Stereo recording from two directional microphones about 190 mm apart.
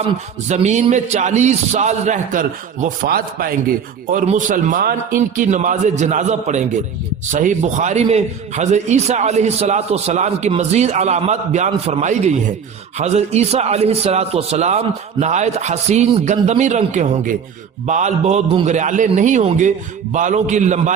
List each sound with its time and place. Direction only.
0.4 s a man's voice: 40° right (ahead or behind)